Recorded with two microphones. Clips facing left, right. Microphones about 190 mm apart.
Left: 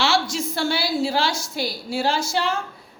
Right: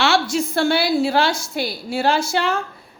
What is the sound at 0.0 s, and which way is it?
A woman's voice, 55° right (ahead or behind).